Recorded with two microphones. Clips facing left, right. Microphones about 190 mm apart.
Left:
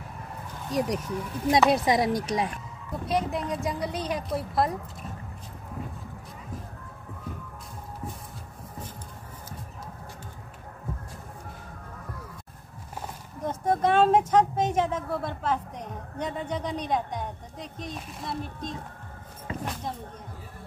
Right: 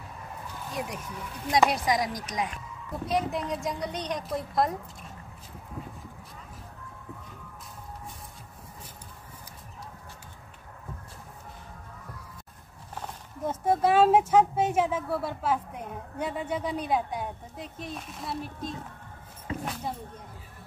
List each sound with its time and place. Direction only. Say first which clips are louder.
0.7 s speech: left 9 dB; 35° left (ahead or behind)
1.7 s speech: left 5 dB; 25° left (ahead or behind)
3.1 s a woman's voice: left 1 dB; centre (ahead or behind)
13.4 s speech: even; 5° right (ahead or behind)